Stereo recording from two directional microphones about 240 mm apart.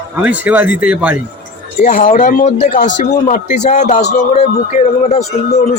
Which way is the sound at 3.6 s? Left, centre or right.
Left.